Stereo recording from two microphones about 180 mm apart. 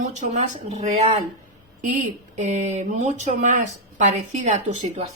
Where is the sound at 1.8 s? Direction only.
45° right (ahead or behind).